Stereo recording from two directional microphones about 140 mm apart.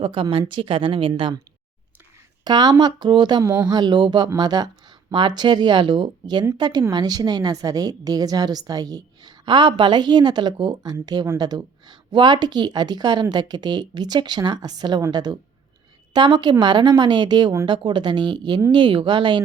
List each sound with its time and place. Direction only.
0.0 s speech: 35° right (ahead or behind)
2.4 s a woman's voice: 30° right (ahead or behind)